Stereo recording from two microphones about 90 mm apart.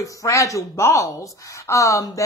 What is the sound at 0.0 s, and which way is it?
Speech, 35° left (ahead or behind).